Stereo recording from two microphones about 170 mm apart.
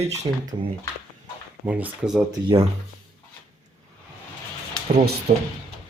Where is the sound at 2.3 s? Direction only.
30° right (ahead or behind).